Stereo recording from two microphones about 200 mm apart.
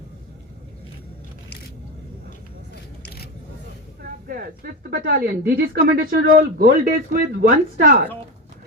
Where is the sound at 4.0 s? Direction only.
45° right (ahead or behind).